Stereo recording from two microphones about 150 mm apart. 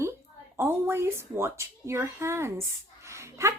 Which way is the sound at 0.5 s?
15° right (ahead or behind).